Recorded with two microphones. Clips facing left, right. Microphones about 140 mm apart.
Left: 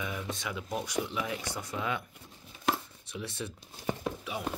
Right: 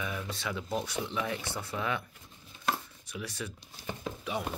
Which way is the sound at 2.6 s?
25° left (ahead or behind).